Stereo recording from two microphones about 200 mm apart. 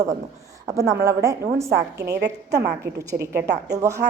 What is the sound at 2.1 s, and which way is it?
Speech, 55° right (ahead or behind).